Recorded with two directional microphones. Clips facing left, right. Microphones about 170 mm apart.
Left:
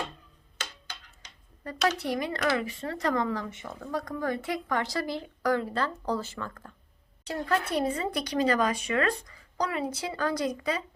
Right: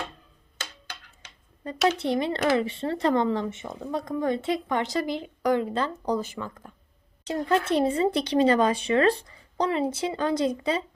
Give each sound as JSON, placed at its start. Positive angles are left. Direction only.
{"t": 1.9, "sound": "speech", "side_deg": -25}